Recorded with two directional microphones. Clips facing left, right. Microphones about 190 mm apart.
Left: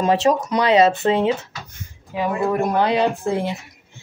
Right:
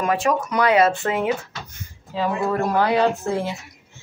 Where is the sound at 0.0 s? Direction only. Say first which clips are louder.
Left 4 dB; 25° left (ahead or behind).